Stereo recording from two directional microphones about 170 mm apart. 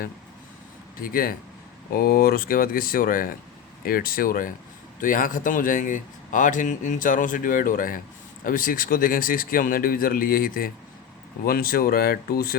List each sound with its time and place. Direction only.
0.9 s speech: 60° left (ahead or behind)